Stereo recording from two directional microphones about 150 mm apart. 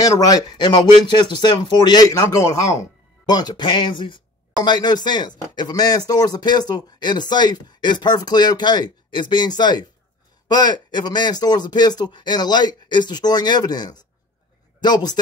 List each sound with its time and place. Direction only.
0.0 s speech: 25° left (ahead or behind)